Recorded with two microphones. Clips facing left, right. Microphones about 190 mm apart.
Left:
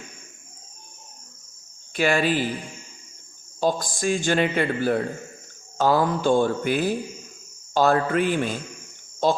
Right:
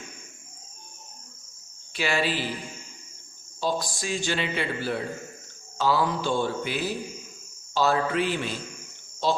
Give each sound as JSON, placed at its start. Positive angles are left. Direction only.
{"t": 2.0, "sound": "a man's voice", "side_deg": 50}
{"t": 3.6, "sound": "a man's voice", "side_deg": 50}